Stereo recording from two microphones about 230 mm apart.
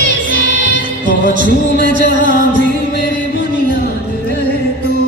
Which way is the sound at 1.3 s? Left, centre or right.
Right.